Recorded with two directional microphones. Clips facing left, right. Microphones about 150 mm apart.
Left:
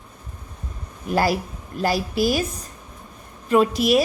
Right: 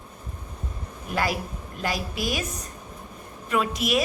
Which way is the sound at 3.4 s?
35° left (ahead or behind).